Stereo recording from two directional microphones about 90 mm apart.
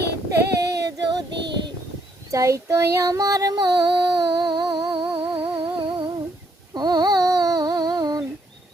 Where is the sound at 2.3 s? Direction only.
35° right (ahead or behind); by 5.0 s 65° right (ahead or behind).